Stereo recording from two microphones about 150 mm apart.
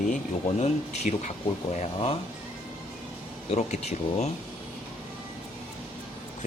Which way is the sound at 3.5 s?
50° left (ahead or behind).